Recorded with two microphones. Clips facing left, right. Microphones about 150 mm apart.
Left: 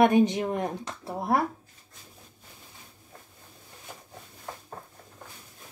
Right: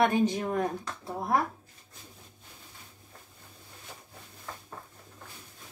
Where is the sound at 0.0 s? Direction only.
20° left (ahead or behind).